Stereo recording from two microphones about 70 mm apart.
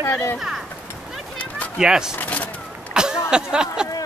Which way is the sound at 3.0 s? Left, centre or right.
Centre.